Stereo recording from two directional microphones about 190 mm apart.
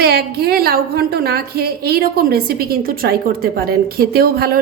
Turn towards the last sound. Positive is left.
turn(degrees=-50)  # may be behind; listen again after turning